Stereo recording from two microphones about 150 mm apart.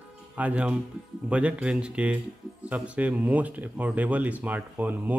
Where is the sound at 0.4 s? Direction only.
10° right (ahead or behind).